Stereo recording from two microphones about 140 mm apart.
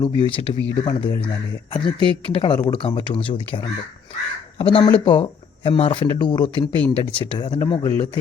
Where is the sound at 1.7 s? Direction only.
35° left (ahead or behind).